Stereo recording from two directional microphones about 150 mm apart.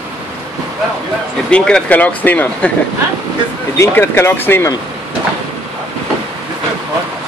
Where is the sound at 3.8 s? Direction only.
15° left (ahead or behind).